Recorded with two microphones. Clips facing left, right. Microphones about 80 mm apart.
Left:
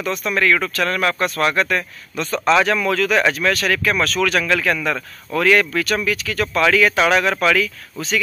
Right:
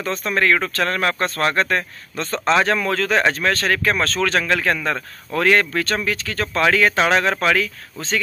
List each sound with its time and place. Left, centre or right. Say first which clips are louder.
0.0 s speech: left 1 dB; right